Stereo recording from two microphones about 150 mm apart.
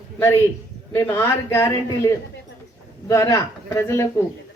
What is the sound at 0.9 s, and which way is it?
Speech, 15° left (ahead or behind).